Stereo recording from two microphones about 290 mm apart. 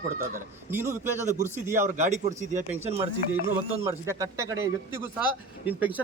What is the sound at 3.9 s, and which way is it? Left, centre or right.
A man's voice, centre.